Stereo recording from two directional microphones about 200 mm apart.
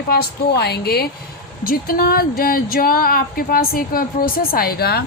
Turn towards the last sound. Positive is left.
turn(degrees=50)  # may be behind; listen again after turning